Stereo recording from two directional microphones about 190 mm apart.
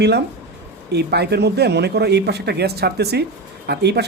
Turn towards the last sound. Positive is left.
turn(degrees=-60)  # may be behind; listen again after turning